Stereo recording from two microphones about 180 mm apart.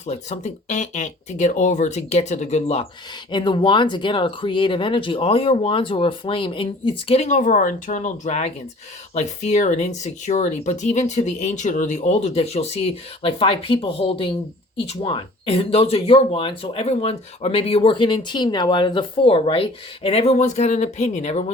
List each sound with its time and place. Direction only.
0.0 s speech: 40° left (ahead or behind)
3.3 s speech: 25° left (ahead or behind)